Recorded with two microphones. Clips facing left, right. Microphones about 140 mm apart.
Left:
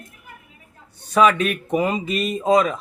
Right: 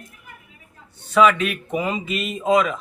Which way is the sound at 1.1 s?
40° left (ahead or behind).